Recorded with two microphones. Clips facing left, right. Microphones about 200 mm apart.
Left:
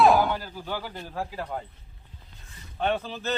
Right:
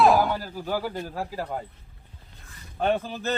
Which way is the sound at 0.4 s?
40° right (ahead or behind).